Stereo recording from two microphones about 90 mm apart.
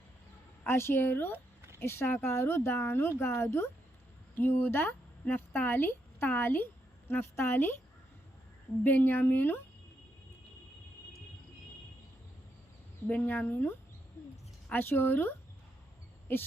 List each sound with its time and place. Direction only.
0.6 s speech: 25° left (ahead or behind)
8.8 s speech: 20° left (ahead or behind)
13.1 s speech: 15° left (ahead or behind)